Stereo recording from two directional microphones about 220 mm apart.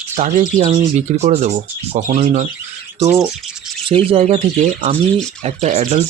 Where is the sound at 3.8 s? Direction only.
25° right (ahead or behind).